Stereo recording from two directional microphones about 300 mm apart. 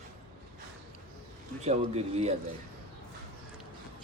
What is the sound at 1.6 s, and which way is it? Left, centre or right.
Speech, right.